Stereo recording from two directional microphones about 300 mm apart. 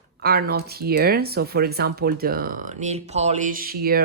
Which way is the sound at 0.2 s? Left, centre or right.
Right.